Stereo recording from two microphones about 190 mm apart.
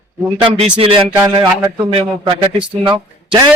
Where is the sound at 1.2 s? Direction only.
15° right (ahead or behind).